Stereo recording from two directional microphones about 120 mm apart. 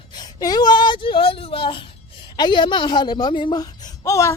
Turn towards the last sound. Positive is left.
turn(degrees=25)  # may be behind; listen again after turning